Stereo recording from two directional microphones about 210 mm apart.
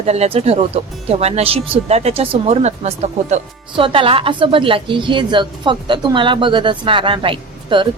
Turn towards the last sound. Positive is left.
turn(degrees=-25)  # may be behind; listen again after turning